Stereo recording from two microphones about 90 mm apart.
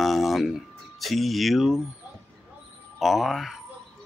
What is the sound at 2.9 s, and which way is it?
Speech, centre (ahead or behind).